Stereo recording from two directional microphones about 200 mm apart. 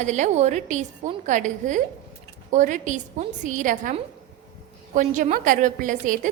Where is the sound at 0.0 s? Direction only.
35° right (ahead or behind).